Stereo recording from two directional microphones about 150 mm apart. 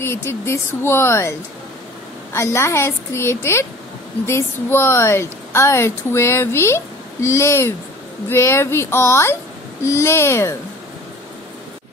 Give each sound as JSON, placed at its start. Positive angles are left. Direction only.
{"t": 0.0, "sound": "a woman's voice", "side_deg": 15}
{"t": 2.3, "sound": "a woman's voice", "side_deg": 20}